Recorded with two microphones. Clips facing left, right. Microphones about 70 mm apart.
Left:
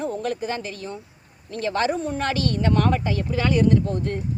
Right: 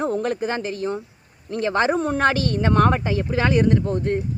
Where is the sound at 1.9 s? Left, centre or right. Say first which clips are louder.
Right 5 dB; right.